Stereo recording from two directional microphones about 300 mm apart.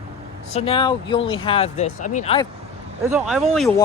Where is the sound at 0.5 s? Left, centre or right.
Centre.